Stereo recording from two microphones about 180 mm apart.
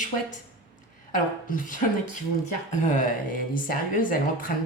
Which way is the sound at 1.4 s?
50° left (ahead or behind).